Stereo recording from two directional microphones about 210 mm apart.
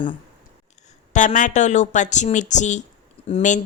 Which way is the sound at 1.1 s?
35° left (ahead or behind).